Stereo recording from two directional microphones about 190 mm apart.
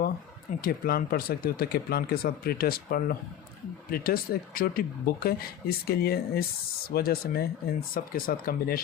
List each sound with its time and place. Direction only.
0.6 s speech: 50° left (ahead or behind)